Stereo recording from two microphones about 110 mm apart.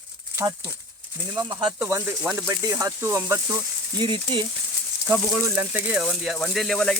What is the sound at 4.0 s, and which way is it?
Speech, 50° right (ahead or behind).